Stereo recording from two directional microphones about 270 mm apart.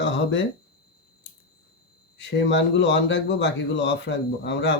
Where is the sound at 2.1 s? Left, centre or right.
Left.